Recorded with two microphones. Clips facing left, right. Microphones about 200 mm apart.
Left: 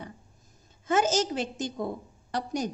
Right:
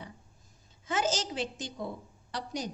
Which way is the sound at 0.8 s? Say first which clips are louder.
Left 6 dB; 50° left (ahead or behind).